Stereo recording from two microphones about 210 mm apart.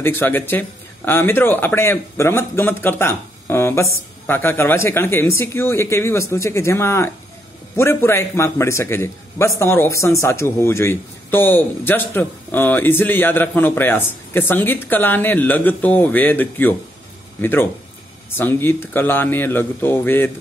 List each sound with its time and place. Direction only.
0.0 s a man's voice: 10° left (ahead or behind)